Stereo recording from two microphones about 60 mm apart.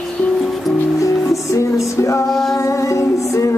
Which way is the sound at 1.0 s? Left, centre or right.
Left.